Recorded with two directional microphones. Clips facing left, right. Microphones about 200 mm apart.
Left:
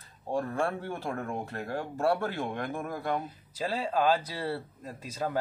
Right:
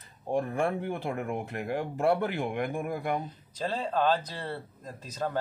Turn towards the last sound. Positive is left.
turn(degrees=10)  # may be behind; listen again after turning